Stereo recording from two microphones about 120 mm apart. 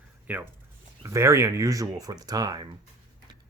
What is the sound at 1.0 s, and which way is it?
Speech, 25° right (ahead or behind).